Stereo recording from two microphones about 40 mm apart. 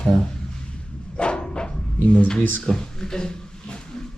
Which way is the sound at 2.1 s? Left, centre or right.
Left.